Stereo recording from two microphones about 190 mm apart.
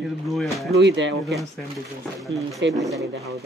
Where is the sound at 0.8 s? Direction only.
70° right (ahead or behind).